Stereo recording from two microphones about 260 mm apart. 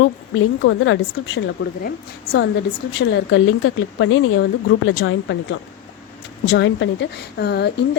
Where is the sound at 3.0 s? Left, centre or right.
Left.